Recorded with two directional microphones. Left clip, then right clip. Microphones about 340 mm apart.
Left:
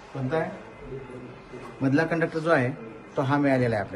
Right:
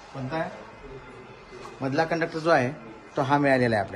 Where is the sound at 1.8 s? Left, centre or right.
Right.